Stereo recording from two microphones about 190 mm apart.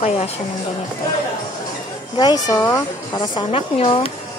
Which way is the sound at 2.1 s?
20° left (ahead or behind).